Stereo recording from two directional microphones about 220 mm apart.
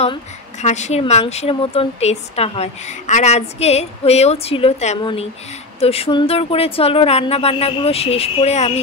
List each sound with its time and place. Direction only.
0.0 s speech: 30° left (ahead or behind)